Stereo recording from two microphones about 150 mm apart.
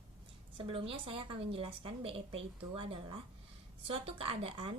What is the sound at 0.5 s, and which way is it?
A woman's voice, 35° right (ahead or behind).